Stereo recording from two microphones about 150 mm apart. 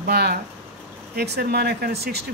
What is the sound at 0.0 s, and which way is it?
Speech, 90° right.